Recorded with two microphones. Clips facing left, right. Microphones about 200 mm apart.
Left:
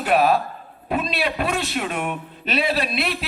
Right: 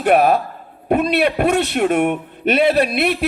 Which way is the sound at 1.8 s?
45° right (ahead or behind).